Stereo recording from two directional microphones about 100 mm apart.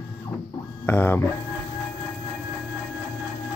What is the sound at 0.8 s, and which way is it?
Speech, 20° left (ahead or behind).